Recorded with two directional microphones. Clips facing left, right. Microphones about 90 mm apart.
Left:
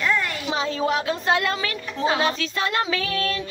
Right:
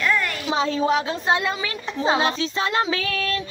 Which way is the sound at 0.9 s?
15° right (ahead or behind).